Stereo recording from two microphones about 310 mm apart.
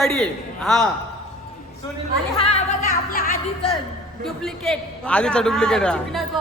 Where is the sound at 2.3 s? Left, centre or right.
Centre.